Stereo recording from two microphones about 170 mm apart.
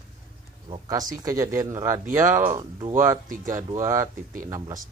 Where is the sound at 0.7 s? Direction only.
20° right (ahead or behind).